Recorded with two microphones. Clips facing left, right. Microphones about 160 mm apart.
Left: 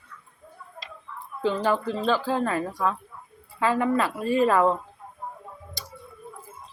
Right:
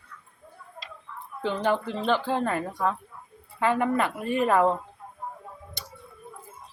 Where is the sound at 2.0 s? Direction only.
55° right (ahead or behind).